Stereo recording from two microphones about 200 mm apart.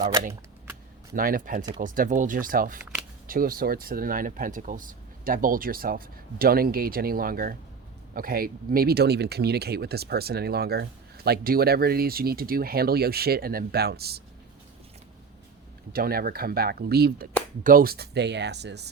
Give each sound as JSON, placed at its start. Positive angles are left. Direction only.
{"t": 1.1, "sound": "speech", "side_deg": -45}
{"t": 15.9, "sound": "speech", "side_deg": -50}